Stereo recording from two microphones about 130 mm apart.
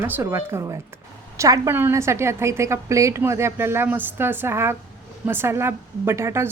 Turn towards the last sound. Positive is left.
turn(degrees=-20)  # may be behind; listen again after turning